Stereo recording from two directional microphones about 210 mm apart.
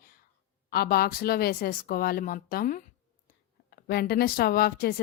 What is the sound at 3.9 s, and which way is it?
Speech, 50° left (ahead or behind).